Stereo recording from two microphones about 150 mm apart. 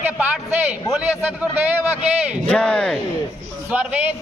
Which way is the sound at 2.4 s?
10° left (ahead or behind).